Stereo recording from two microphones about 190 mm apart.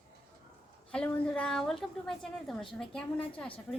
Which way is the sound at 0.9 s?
5° left (ahead or behind).